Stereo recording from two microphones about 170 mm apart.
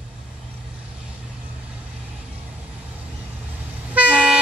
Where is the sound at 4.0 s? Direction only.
10° right (ahead or behind).